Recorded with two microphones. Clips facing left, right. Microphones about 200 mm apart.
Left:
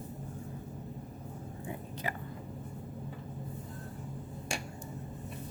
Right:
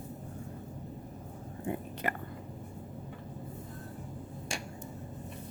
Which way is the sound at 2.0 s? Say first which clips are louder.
Right 3 dB; 60° right (ahead or behind).